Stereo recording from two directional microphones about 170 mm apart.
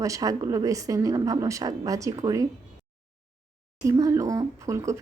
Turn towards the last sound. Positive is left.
turn(degrees=-20)  # may be behind; listen again after turning